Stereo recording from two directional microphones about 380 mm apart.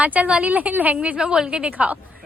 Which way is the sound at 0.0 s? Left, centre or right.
Centre.